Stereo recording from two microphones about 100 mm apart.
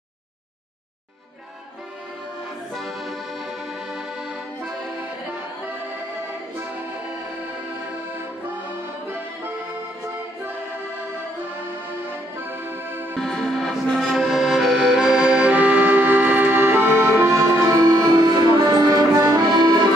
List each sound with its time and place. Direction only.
2.7 s accordion: centre (ahead or behind)
12.4 s accordion: 20° right (ahead or behind)
13.2 s accordion: 5° left (ahead or behind); by 19.8 s 45° right (ahead or behind)